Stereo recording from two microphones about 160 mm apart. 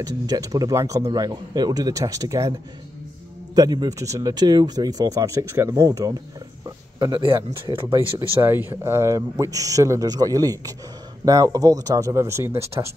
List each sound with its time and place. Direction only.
0.0 s speech: 25° right (ahead or behind)
3.5 s speech: 25° right (ahead or behind)
8.2 s speech: 15° right (ahead or behind)